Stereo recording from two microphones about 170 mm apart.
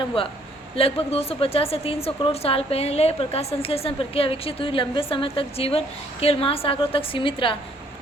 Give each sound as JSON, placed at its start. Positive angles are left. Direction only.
{"t": 0.2, "sound": "a woman's voice", "side_deg": 35}